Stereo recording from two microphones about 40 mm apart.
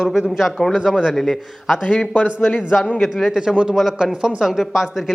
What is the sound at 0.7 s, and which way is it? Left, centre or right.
Speech, centre.